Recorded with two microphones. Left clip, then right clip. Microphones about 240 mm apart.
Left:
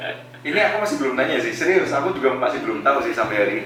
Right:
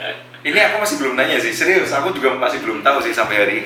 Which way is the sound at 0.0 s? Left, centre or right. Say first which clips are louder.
Right 5 dB; centre.